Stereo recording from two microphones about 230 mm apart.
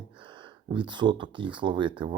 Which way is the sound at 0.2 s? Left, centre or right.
Right.